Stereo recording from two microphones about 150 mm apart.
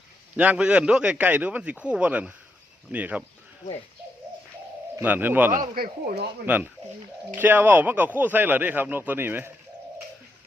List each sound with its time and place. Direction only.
0.3 s speech: 10° right (ahead or behind)
4.9 s speech: 15° right (ahead or behind)
5.5 s speech: 75° right (ahead or behind)
6.4 s speech: 10° right (ahead or behind)